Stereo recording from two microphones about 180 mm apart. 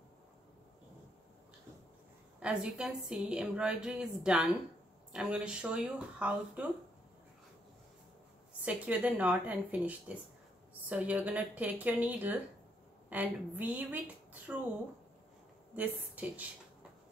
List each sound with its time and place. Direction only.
2.4 s a woman's voice: 5° right (ahead or behind)
8.6 s a woman's voice: 10° right (ahead or behind)
15.7 s a woman's voice: 10° right (ahead or behind)